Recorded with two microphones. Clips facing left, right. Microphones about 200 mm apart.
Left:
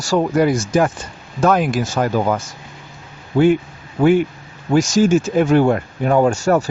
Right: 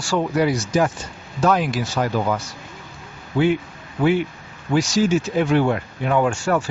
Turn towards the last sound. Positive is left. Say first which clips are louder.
# left 5 dB
turn(degrees=40)  # may be behind; listen again after turning